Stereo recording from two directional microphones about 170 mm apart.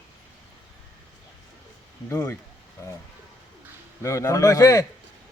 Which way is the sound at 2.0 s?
15° left (ahead or behind).